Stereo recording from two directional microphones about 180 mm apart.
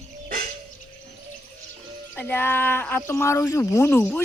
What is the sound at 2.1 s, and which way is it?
Speech, 10° left (ahead or behind).